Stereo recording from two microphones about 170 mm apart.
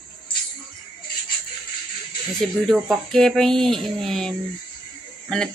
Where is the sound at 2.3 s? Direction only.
Centre (ahead or behind).